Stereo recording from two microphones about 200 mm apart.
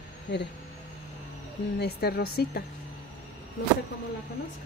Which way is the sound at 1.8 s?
55° left (ahead or behind).